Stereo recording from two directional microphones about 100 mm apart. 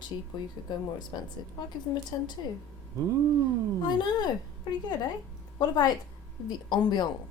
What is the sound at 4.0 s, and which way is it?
Speech, 45° left (ahead or behind).